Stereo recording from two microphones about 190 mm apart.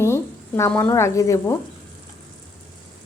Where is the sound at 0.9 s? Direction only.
15° left (ahead or behind).